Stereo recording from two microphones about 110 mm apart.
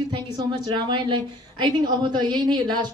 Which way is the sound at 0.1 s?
45° right (ahead or behind).